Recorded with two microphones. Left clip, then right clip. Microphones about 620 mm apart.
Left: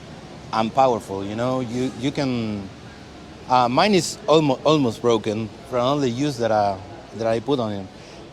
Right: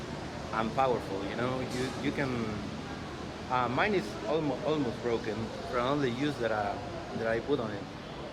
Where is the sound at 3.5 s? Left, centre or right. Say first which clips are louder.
Left 12 dB; left.